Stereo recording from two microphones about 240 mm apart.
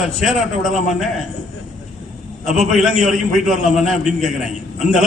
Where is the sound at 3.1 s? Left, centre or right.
Centre.